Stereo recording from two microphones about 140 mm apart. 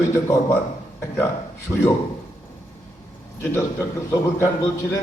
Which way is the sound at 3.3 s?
15° left (ahead or behind).